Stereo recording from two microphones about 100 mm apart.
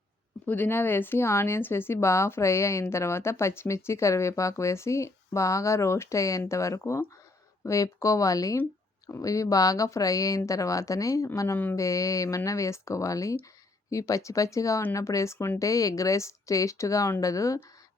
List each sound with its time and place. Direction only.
0.4 s speech: 20° left (ahead or behind); by 17.6 s 35° left (ahead or behind)